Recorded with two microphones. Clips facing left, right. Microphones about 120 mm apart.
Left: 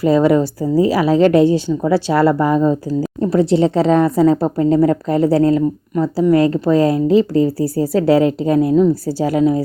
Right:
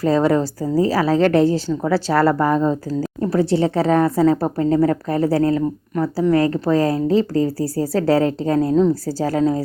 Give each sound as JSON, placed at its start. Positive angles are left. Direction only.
{"t": 0.0, "sound": "speech", "side_deg": 15}